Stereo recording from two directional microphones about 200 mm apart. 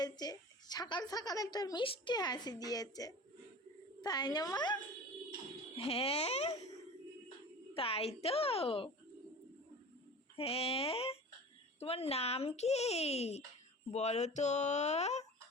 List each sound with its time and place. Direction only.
0.0 s a woman's voice: 20° left (ahead or behind)
7.7 s a woman's voice: 30° left (ahead or behind)
10.3 s a woman's voice: 30° left (ahead or behind)